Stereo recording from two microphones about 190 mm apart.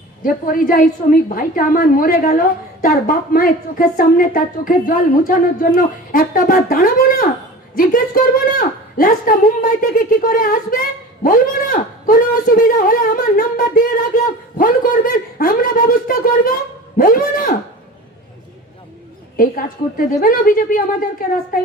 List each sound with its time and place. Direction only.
0.2 s a woman's voice: 45° left (ahead or behind)
20.1 s a woman's voice: 45° left (ahead or behind)